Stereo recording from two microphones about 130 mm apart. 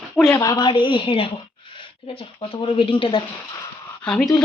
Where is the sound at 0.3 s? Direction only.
30° left (ahead or behind).